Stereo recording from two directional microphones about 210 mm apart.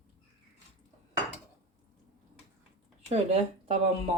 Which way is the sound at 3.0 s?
30° right (ahead or behind).